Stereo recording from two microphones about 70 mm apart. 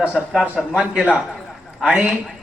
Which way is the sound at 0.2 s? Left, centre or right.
Centre.